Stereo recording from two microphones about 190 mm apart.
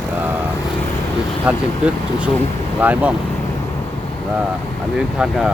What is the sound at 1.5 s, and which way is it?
Speech, 5° right (ahead or behind).